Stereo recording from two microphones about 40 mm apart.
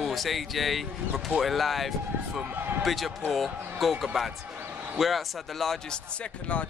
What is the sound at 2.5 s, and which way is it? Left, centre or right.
Speech, right.